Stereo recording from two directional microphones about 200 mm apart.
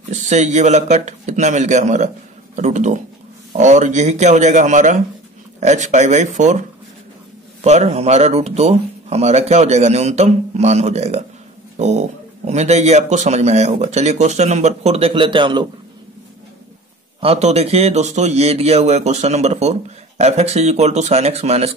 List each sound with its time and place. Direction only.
0.1 s a man's voice: 35° right (ahead or behind)
7.6 s a man's voice: 35° right (ahead or behind)
17.2 s a man's voice: 30° right (ahead or behind)